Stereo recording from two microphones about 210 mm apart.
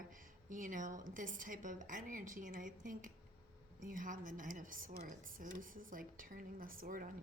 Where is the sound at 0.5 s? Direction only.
40° right (ahead or behind).